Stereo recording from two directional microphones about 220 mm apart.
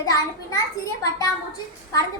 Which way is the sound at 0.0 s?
15° left (ahead or behind).